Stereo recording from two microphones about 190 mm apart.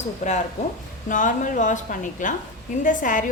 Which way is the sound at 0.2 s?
35° left (ahead or behind).